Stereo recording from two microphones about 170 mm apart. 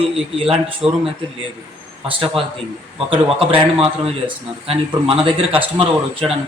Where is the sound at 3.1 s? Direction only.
30° right (ahead or behind).